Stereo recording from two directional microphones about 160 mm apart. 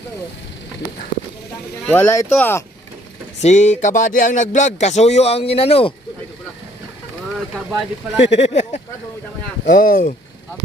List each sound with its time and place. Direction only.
1.9 s speech: 15° left (ahead or behind)
3.4 s speech: 45° left (ahead or behind)
7.3 s speech: centre (ahead or behind)
8.2 s speech: 40° left (ahead or behind)
9.6 s speech: 60° left (ahead or behind)